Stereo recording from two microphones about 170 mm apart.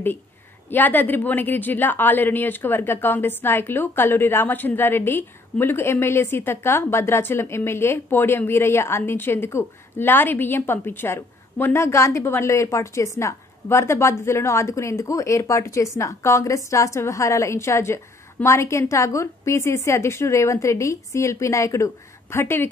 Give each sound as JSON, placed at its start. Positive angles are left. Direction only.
{"t": 0.7, "sound": "a woman's voice", "side_deg": 10}